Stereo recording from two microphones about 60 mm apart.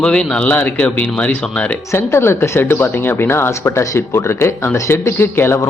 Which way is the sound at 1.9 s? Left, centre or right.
Left.